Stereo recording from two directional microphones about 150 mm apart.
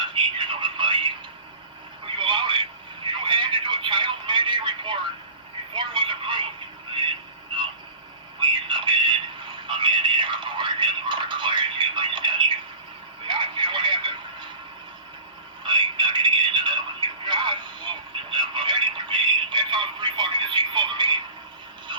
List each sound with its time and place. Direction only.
0.0 s telephone: 35° right (ahead or behind)
5.7 s radio: 30° right (ahead or behind)
6.9 s a sound: 35° right (ahead or behind)
15.6 s telephone: 30° right (ahead or behind)